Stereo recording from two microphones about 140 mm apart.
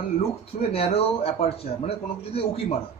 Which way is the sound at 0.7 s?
45° left (ahead or behind).